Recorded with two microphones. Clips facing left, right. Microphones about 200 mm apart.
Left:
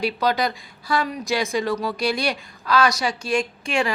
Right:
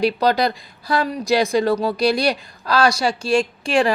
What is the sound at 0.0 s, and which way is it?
A woman's voice, 35° right (ahead or behind).